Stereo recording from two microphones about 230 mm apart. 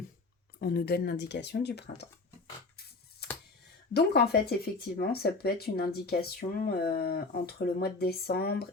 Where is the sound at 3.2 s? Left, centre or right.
Left.